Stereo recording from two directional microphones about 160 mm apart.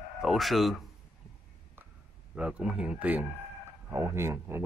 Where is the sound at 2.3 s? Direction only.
5° right (ahead or behind).